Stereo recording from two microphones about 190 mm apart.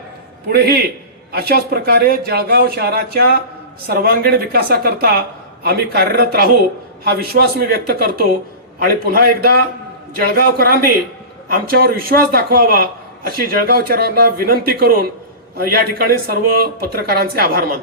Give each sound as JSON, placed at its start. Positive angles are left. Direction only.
{"t": 0.5, "sound": "a man's voice", "side_deg": -55}